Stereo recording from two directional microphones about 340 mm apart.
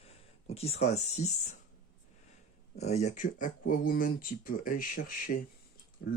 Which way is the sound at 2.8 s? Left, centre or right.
Centre.